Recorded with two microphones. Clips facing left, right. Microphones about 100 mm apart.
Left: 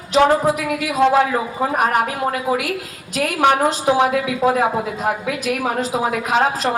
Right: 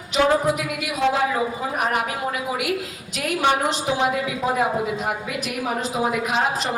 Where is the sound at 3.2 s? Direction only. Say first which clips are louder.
Left 5 dB; 60° left (ahead or behind).